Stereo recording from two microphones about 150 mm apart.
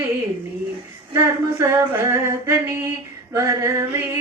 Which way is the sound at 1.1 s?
20° right (ahead or behind).